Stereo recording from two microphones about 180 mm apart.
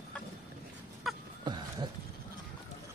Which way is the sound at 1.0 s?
Centre (ahead or behind).